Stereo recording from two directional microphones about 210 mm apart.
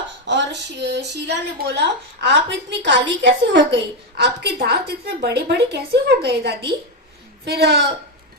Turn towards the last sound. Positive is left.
turn(degrees=-50)  # may be behind; listen again after turning